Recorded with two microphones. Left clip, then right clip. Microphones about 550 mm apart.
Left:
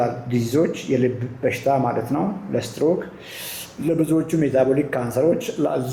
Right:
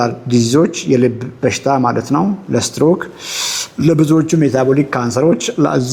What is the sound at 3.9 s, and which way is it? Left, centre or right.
A man's voice, right.